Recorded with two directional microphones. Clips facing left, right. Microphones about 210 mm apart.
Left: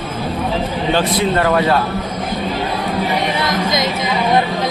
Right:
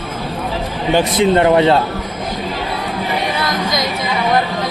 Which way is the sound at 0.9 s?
20° right (ahead or behind).